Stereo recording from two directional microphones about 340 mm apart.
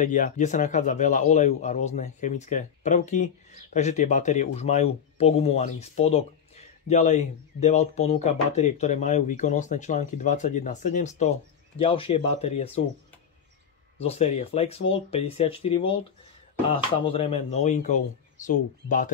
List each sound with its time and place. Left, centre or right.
0.0 s speech: left
13.9 s speech: centre